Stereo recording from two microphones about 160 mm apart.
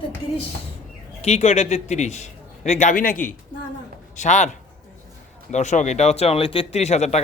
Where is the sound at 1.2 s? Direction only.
40° left (ahead or behind); by 3.3 s 60° left (ahead or behind).